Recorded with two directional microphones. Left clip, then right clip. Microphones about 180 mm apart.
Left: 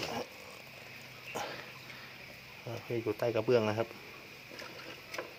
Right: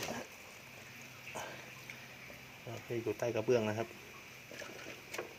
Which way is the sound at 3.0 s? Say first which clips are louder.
Left 3 dB; 15° left (ahead or behind).